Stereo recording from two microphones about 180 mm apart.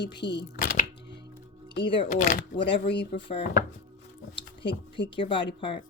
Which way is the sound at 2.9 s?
75° left (ahead or behind).